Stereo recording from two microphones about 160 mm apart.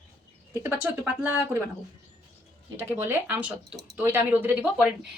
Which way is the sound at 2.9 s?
15° right (ahead or behind).